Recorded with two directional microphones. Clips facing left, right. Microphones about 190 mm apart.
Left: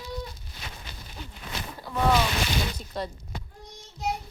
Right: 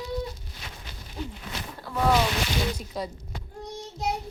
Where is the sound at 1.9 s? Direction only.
Centre (ahead or behind).